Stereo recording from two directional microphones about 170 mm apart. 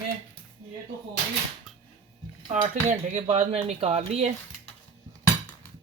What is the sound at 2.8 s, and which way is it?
Speech, 45° right (ahead or behind).